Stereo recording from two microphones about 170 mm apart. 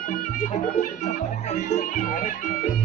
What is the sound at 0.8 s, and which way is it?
Music, 45° left (ahead or behind).